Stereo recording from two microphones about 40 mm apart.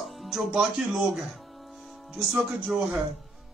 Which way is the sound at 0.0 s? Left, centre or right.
Centre.